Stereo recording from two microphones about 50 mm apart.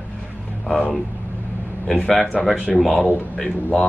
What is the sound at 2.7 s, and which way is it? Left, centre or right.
Speech, centre.